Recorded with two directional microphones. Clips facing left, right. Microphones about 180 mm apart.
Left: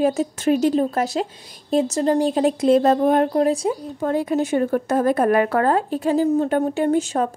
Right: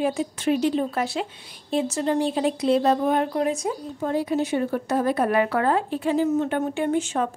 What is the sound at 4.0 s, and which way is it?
A woman's voice, 55° left (ahead or behind).